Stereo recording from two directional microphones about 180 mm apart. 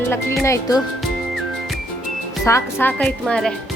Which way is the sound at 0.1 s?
15° left (ahead or behind).